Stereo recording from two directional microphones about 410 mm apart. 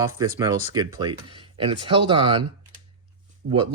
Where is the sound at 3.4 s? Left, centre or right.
Right.